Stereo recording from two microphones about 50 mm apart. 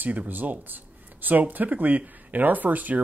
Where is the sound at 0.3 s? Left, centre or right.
Right.